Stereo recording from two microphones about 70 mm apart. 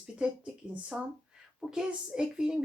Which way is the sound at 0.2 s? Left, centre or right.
Centre.